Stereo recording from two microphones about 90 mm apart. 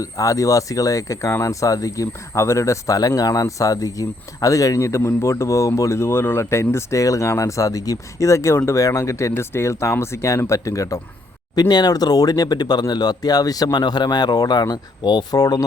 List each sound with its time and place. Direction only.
0.0 s speech: 40° left (ahead or behind)
11.5 s a man's voice: 50° left (ahead or behind)